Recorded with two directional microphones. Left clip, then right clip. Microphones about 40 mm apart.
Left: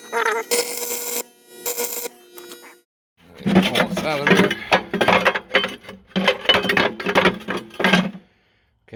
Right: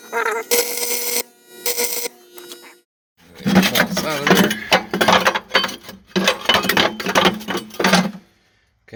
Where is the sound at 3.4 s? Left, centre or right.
Left.